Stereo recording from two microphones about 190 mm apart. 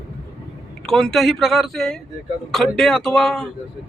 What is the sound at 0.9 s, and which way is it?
Speech, centre (ahead or behind).